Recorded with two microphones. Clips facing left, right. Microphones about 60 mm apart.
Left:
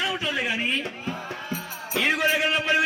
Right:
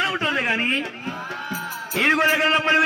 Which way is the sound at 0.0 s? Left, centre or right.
Right.